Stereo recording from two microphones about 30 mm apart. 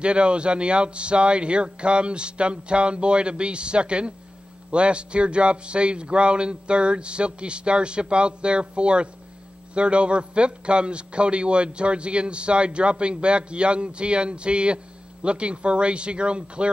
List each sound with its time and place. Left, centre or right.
0.0 s a man's voice: right